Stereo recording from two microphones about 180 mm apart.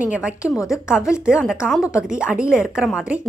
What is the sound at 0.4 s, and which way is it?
Speech, 15° left (ahead or behind).